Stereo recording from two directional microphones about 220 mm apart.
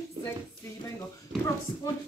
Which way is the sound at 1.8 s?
10° left (ahead or behind).